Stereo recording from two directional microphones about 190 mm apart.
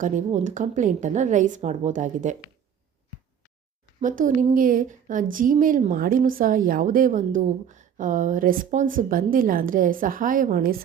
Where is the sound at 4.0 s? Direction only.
45° right (ahead or behind).